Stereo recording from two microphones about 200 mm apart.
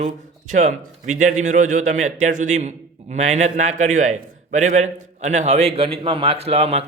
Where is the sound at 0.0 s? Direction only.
40° right (ahead or behind).